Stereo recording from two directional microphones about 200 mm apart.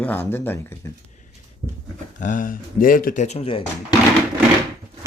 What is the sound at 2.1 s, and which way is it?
Speech, 40° left (ahead or behind).